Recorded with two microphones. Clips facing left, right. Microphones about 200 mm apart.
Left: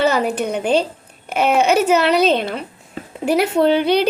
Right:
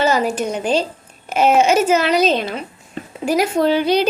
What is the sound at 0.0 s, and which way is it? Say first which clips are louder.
Speech: even; 60° left (ahead or behind).